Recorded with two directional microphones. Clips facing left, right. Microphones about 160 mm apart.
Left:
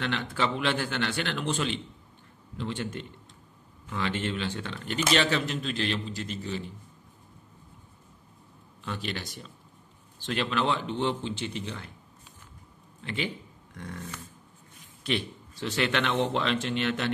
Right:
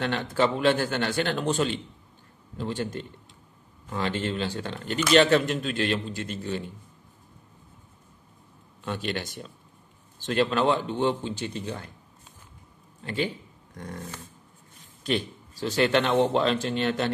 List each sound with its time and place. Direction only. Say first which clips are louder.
0.0 s speech: right 5 dB; 40° right (ahead or behind)
8.8 s speech: right 4 dB; 50° right (ahead or behind)
13.0 s speech: right 4 dB; 40° right (ahead or behind)
15.0 s speech: right 3 dB; 40° right (ahead or behind)